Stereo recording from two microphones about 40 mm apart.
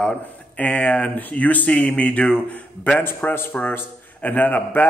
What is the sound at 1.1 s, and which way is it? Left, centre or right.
Speech, left.